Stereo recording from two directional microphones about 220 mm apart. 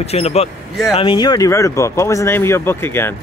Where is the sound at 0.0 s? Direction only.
30° left (ahead or behind).